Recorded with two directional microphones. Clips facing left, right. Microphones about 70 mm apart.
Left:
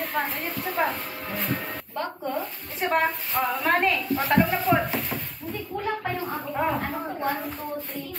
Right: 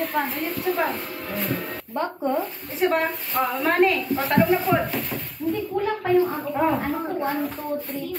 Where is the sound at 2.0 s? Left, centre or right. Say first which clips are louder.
Right 4 dB; right.